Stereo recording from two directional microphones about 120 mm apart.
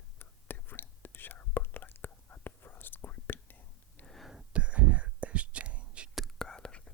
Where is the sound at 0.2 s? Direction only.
15° left (ahead or behind).